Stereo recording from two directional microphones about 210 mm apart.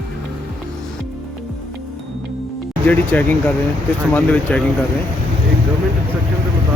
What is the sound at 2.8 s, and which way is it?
Speech, 10° left (ahead or behind).